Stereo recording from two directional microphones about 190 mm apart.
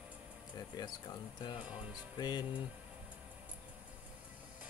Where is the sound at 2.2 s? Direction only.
20° left (ahead or behind).